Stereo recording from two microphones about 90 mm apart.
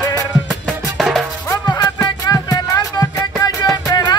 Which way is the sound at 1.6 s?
45° left (ahead or behind).